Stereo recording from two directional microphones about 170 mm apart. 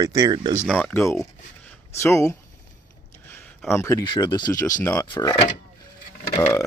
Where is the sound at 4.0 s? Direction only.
25° left (ahead or behind).